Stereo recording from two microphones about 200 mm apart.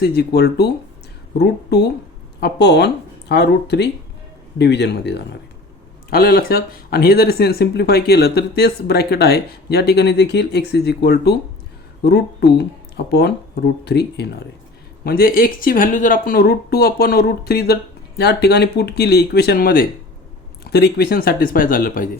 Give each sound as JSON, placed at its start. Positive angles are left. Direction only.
{"t": 0.0, "sound": "speech", "side_deg": 50}